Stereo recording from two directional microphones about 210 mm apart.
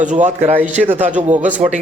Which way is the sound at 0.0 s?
35° right (ahead or behind).